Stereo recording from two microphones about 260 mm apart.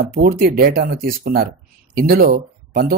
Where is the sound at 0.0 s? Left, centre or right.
Right.